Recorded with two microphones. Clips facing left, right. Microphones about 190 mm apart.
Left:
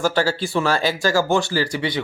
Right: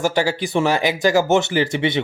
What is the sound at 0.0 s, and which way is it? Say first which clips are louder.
Speech: right 1 dB; 15° right (ahead or behind).